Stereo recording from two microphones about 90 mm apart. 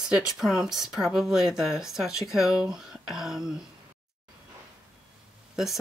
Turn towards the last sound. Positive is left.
turn(degrees=-5)  # may be behind; listen again after turning